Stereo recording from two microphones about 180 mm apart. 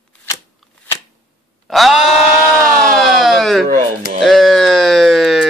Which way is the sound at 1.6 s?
Centre (ahead or behind).